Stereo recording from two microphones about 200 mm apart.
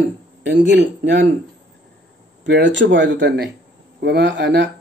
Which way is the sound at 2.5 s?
60° right (ahead or behind).